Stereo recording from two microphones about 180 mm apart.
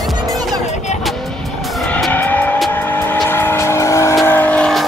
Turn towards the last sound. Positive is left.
turn(degrees=5)  # may be behind; listen again after turning